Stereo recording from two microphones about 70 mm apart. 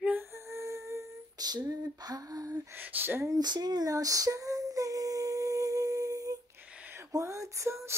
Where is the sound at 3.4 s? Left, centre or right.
Right.